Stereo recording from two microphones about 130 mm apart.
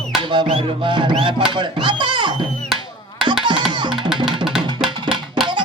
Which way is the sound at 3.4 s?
35° right (ahead or behind).